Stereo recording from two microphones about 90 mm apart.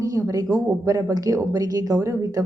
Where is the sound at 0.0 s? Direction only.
40° right (ahead or behind).